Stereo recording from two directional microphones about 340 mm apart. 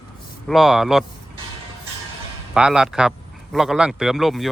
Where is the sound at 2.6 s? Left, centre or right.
Centre.